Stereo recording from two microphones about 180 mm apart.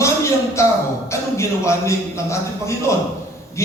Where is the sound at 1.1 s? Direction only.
15° left (ahead or behind).